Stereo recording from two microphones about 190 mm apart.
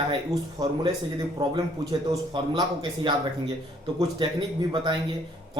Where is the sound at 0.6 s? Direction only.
20° right (ahead or behind).